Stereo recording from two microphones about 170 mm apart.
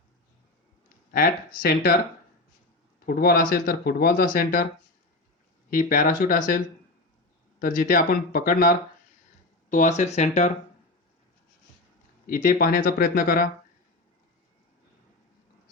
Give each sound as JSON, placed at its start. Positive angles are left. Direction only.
{"t": 1.6, "sound": "speech", "side_deg": 60}
{"t": 3.1, "sound": "speech", "side_deg": 60}
{"t": 5.7, "sound": "speech", "side_deg": 55}
{"t": 7.6, "sound": "speech", "side_deg": 55}
{"t": 12.2, "sound": "speech", "side_deg": 55}